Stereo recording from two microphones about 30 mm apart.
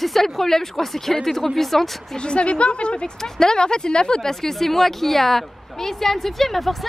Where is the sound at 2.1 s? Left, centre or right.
Left.